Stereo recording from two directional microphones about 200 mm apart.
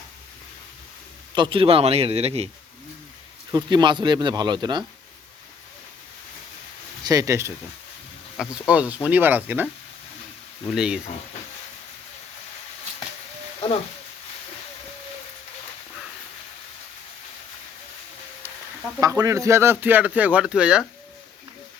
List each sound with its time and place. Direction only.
1.4 s speech: 25° right (ahead or behind)
3.5 s speech: 20° right (ahead or behind)
7.0 s speech: 20° right (ahead or behind)
10.7 s speech: 5° right (ahead or behind)
18.9 s speech: 15° right (ahead or behind)